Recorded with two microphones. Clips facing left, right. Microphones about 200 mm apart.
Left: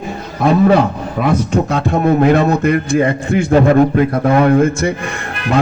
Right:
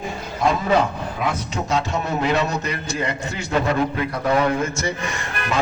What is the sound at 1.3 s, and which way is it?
A man's voice, 55° left (ahead or behind).